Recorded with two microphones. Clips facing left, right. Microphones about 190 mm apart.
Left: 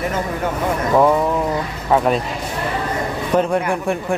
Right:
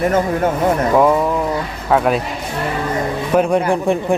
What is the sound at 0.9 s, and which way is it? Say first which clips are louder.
Speech: left 2 dB; centre (ahead or behind).